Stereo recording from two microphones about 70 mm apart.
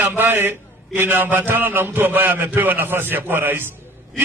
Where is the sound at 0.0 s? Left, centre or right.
Right.